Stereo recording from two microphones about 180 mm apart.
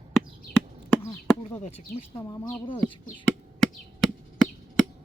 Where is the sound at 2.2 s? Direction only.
20° left (ahead or behind).